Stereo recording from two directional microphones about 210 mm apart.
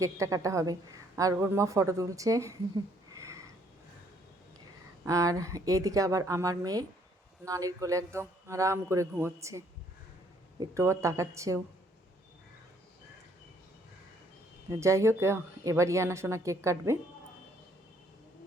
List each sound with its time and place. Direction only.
0.0 s a woman's voice: 15° right (ahead or behind)
5.0 s a woman's voice: 15° right (ahead or behind)
14.7 s a woman's voice: 15° right (ahead or behind)